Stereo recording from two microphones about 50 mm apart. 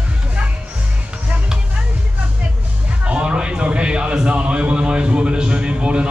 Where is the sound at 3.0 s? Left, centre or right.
Right.